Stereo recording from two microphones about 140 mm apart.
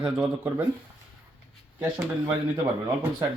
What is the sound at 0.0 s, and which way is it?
Speech, 15° right (ahead or behind).